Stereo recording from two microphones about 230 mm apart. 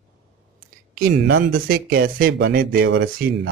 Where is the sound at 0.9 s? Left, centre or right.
Right.